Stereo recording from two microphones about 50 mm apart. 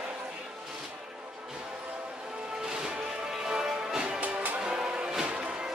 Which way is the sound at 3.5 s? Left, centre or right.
Centre.